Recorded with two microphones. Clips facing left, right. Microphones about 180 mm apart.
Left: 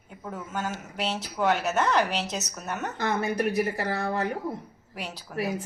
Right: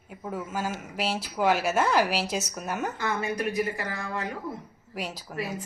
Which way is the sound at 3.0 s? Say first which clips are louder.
Left 7 dB; 35° left (ahead or behind).